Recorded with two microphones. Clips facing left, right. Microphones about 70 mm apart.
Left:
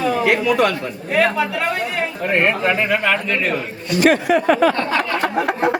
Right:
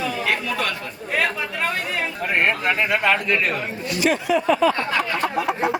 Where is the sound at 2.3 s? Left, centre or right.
Centre.